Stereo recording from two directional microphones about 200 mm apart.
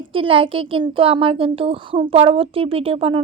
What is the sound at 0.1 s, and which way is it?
Speech, 25° right (ahead or behind).